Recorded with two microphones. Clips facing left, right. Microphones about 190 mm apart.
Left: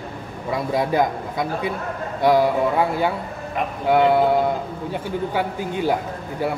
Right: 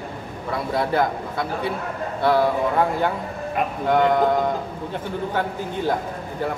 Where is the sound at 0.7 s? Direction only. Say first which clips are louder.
Left 1 dB; 15° left (ahead or behind).